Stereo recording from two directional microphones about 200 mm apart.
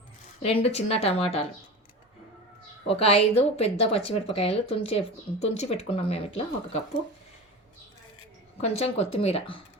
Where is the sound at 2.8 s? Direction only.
30° left (ahead or behind).